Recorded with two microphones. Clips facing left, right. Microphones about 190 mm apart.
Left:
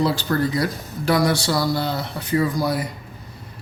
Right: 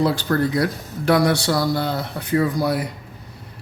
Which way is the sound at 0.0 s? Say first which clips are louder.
Right 1 dB; 55° right (ahead or behind).